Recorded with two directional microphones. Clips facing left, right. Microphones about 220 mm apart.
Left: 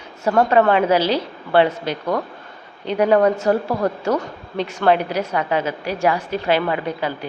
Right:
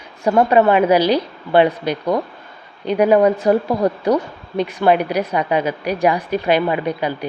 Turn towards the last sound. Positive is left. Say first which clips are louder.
# right 3 dB
turn(degrees=-15)  # may be behind; listen again after turning